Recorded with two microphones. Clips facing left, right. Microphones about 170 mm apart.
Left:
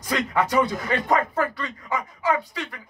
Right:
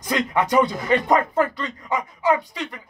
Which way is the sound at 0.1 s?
15° right (ahead or behind).